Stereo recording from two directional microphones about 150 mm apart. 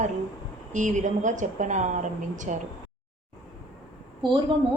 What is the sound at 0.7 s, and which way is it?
A woman's voice, 55° right (ahead or behind).